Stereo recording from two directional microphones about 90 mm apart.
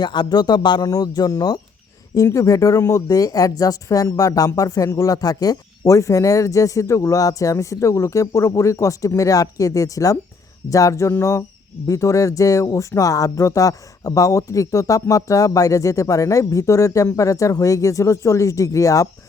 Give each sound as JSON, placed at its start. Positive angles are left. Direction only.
{"t": 0.0, "sound": "speech", "side_deg": 55}